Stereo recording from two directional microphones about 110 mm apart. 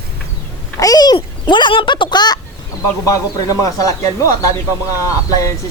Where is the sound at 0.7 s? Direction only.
35° left (ahead or behind).